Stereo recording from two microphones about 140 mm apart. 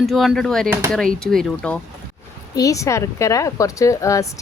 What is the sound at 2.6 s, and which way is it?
Speech, 25° left (ahead or behind).